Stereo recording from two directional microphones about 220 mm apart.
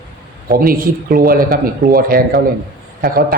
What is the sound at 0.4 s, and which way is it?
Speech, 40° right (ahead or behind).